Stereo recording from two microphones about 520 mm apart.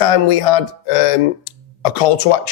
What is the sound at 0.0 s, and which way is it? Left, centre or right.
Speech, left.